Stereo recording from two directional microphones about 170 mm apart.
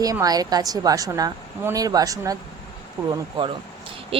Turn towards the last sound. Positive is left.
turn(degrees=-30)  # may be behind; listen again after turning